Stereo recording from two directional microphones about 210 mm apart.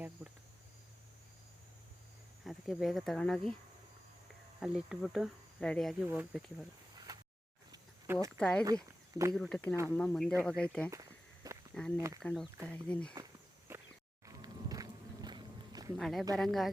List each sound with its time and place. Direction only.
0.2 s cricket: 10° right (ahead or behind)
2.4 s speech: centre (ahead or behind)
4.6 s speech: centre (ahead or behind)
7.1 s a sound: 15° right (ahead or behind)
8.4 s speech: 5° left (ahead or behind)
8.6 s speech: 15° right (ahead or behind)
9.3 s speech: centre (ahead or behind)
11.9 s speech: 15° right (ahead or behind)
12.2 s speech: centre (ahead or behind)
13.7 s a sound: 10° right (ahead or behind)
14.3 s music: 15° right (ahead or behind)
16.0 s speech: centre (ahead or behind)